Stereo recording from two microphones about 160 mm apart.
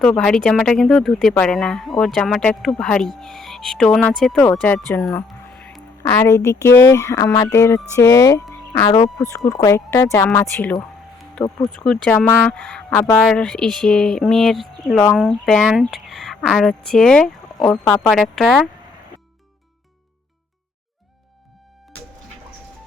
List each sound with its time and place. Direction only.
0.0 s a woman's voice: 5° left (ahead or behind)
4.9 s music: centre (ahead or behind)
6.0 s a woman's voice: 15° left (ahead or behind)
10.6 s a sound: 5° left (ahead or behind)
11.6 s a woman's voice: centre (ahead or behind)